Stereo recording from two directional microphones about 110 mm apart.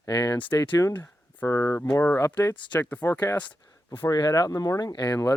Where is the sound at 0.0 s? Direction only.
30° left (ahead or behind).